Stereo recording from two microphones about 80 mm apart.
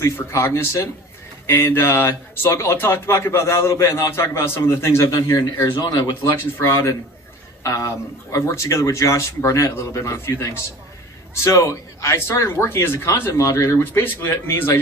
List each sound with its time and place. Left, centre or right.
0.3 s a man's voice: left
5.8 s speech: left
6.2 s a man's voice: left